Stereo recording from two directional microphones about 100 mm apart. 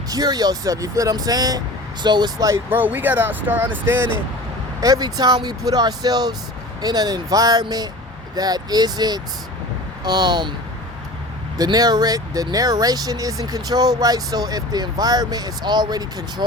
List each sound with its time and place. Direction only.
0.1 s speech: 40° right (ahead or behind)
2.6 s speech: 20° right (ahead or behind)
4.8 s speech: 40° right (ahead or behind)
11.5 s speech: 40° right (ahead or behind)